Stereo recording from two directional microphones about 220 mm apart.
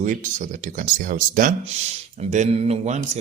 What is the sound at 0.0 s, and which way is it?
Speech, 35° right (ahead or behind).